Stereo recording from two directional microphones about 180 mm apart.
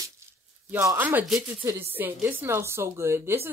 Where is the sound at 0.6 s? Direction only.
15° right (ahead or behind).